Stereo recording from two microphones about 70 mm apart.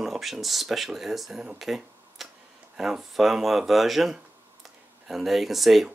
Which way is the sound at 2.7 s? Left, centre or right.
Centre.